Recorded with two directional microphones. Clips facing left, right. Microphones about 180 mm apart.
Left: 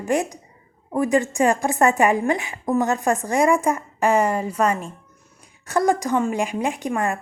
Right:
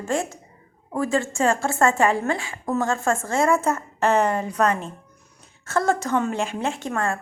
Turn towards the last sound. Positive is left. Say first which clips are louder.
# left 2 dB
turn(degrees=15)  # may be behind; listen again after turning